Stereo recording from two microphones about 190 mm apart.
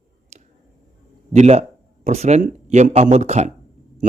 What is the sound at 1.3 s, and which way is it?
A man's voice, 35° right (ahead or behind).